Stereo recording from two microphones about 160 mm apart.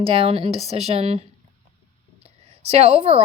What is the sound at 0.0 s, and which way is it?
Speech, 35° right (ahead or behind).